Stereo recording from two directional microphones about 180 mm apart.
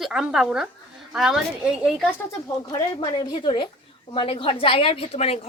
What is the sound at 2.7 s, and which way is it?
A woman's voice, 25° left (ahead or behind).